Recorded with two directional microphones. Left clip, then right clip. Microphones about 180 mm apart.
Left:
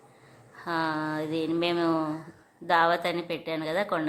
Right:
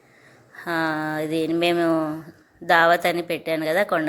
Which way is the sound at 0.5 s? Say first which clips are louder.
Right 5 dB; 20° right (ahead or behind).